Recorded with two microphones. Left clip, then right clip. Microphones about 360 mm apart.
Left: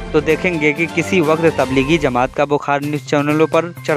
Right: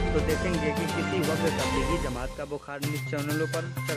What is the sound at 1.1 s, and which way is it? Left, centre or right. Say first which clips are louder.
Speech: left 15 dB; left.